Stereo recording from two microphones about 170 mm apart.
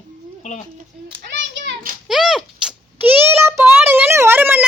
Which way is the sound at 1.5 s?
90° right.